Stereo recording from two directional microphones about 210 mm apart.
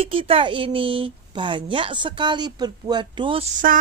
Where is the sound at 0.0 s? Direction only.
25° right (ahead or behind).